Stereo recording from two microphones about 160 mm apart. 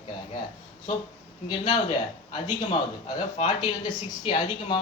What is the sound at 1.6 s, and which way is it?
Speech, 30° left (ahead or behind).